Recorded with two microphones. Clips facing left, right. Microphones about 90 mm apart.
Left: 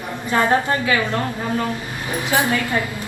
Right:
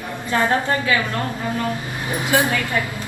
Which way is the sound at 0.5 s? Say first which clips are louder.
Left 1 dB; 25° left (ahead or behind).